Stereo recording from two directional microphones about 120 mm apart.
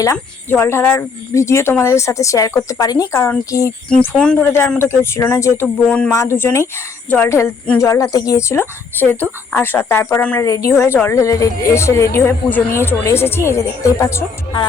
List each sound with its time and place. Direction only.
0.5 s speech: 20° left (ahead or behind)
4.4 s speech: 15° left (ahead or behind)
5.6 s speech: 5° left (ahead or behind)
6.1 s speech: 20° left (ahead or behind)